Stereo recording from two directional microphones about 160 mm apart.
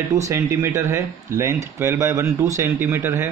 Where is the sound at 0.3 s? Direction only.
20° right (ahead or behind).